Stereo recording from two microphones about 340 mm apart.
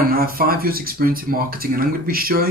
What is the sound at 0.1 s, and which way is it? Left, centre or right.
Speech, right.